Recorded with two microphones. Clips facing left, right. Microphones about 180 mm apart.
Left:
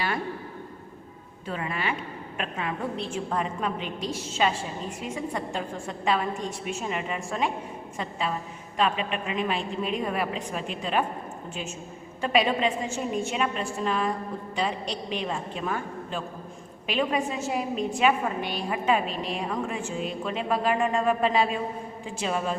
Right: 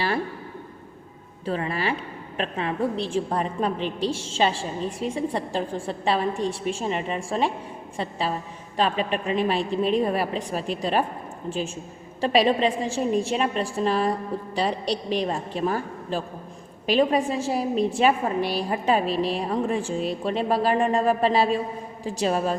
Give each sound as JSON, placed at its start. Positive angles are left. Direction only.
{"t": 1.5, "sound": "a woman's voice", "side_deg": -35}